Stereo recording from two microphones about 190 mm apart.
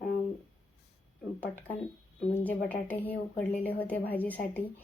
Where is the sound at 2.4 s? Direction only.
10° left (ahead or behind).